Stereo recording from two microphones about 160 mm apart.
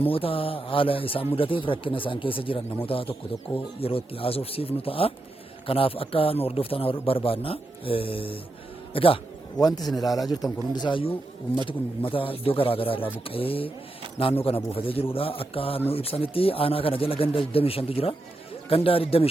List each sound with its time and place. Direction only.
0.0 s a man's voice: 35° left (ahead or behind)